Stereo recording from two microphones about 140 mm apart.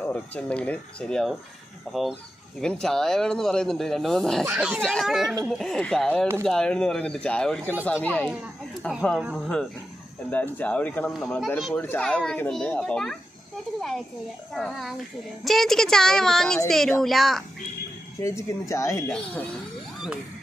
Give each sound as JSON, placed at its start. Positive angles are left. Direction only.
{"t": 0.0, "sound": "a child's voice", "side_deg": 10}
{"t": 10.3, "sound": "a child's voice", "side_deg": 10}
{"t": 18.2, "sound": "speech", "side_deg": 20}
{"t": 19.1, "sound": "a child's voice", "side_deg": 10}